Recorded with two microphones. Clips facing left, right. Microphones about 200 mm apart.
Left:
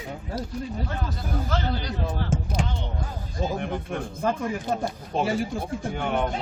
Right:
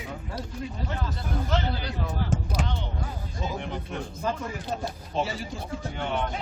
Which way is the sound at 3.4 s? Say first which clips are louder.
Left 5 dB; 50° left (ahead or behind).